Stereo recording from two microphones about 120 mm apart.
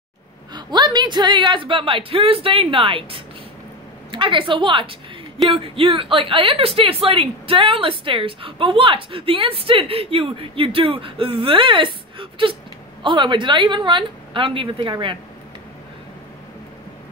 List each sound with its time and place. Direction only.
0.5 s a woman's voice: 35° right (ahead or behind)